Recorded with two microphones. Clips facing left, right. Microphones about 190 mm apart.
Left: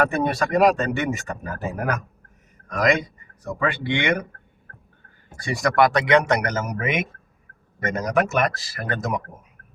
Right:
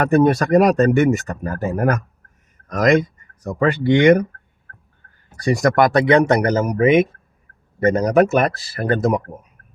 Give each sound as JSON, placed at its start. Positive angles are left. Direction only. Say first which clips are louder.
{"t": 0.0, "sound": "speech", "louder": "right 7 dB", "side_deg": -45}
{"t": 5.4, "sound": "speech", "louder": "right 4 dB", "side_deg": -45}